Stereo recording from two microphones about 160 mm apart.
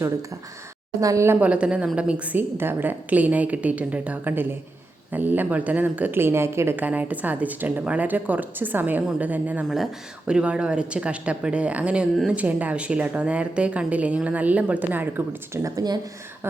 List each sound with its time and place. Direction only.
0.0 s speech: 20° right (ahead or behind)